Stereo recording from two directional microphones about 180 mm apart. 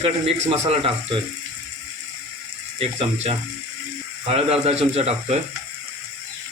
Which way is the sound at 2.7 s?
35° right (ahead or behind).